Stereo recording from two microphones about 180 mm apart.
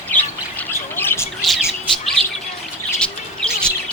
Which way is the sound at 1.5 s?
Centre (ahead or behind).